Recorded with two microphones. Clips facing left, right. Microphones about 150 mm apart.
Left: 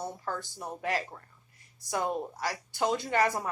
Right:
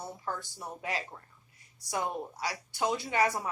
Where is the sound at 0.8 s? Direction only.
45° left (ahead or behind).